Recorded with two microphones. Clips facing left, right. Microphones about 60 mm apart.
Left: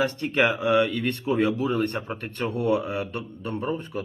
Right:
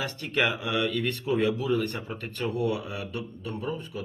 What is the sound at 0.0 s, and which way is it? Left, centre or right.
A man's voice, left.